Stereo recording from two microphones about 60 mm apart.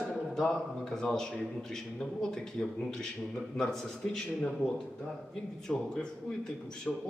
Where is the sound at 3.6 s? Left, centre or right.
Centre.